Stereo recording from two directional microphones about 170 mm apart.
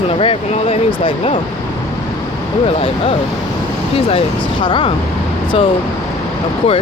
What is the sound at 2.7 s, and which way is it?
Speech, 35° left (ahead or behind).